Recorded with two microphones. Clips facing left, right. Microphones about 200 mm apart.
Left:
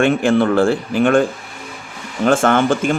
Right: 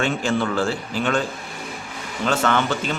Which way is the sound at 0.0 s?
55° left (ahead or behind).